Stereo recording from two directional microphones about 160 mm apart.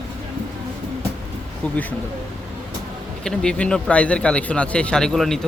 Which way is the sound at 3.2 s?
5° left (ahead or behind).